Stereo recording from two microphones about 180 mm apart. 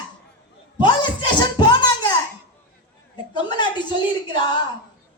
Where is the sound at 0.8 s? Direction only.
25° left (ahead or behind).